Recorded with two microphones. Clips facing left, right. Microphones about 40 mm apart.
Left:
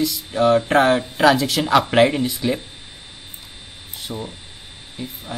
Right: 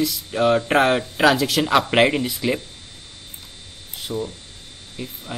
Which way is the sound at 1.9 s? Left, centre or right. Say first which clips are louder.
Left 2 dB; centre.